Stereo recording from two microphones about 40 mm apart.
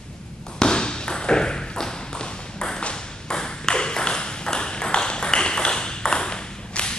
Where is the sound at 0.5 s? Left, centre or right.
Left.